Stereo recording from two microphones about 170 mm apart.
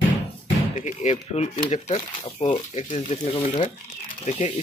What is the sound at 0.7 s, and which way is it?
Speech, 40° left (ahead or behind).